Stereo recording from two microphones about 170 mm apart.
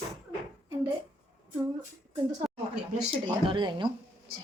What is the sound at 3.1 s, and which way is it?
Speech, 30° right (ahead or behind).